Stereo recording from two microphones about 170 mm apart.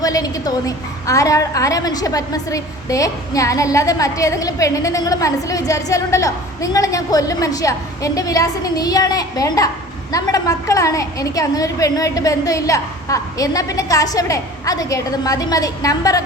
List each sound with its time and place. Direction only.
0.0 s a woman's voice: 20° left (ahead or behind)